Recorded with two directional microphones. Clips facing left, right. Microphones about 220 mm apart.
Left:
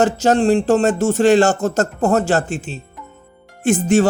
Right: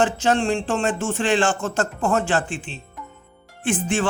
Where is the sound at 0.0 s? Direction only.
40° left (ahead or behind).